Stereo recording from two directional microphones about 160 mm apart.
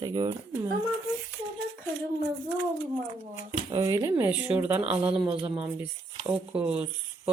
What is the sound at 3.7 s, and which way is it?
Speech, 20° right (ahead or behind).